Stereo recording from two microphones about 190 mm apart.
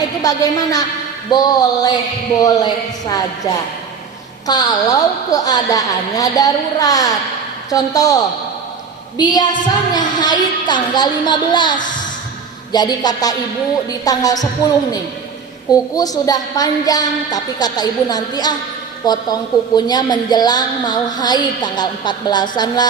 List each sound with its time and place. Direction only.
0.2 s a woman's voice: 20° left (ahead or behind)
4.4 s a woman's voice: 20° left (ahead or behind)
16.0 s a woman's voice: 20° left (ahead or behind)